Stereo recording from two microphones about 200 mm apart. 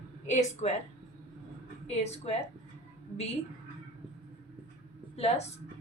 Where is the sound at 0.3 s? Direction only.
35° left (ahead or behind).